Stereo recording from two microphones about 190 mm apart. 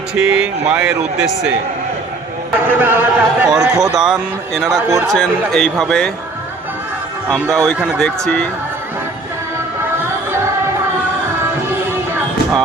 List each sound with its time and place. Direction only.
0.3 s a man's voice: 5° right (ahead or behind)
2.6 s a man's voice: 10° right (ahead or behind)
4.9 s speech: 15° right (ahead or behind)
5.1 s a man's voice: 5° left (ahead or behind)
7.5 s a man's voice: centre (ahead or behind)